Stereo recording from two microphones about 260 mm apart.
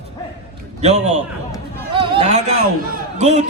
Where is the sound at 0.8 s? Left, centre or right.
Right.